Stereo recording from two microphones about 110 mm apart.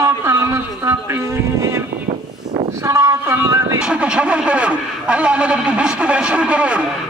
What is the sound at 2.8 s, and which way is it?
Speech, 25° right (ahead or behind).